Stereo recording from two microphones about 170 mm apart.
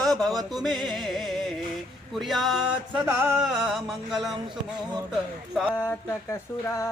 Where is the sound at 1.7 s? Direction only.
Centre (ahead or behind).